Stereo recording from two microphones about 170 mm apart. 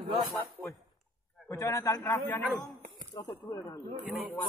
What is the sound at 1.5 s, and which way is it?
A man's voice, 20° left (ahead or behind).